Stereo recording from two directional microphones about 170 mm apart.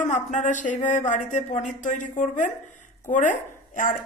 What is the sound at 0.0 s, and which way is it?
Speech, 45° left (ahead or behind).